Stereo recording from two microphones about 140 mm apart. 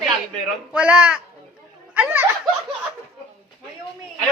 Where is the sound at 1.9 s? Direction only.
15° right (ahead or behind).